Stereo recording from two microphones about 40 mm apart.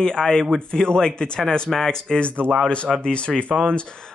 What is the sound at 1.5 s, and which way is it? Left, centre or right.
Speech, centre.